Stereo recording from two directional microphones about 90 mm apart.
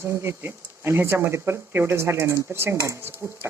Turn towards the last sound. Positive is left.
turn(degrees=-25)  # may be behind; listen again after turning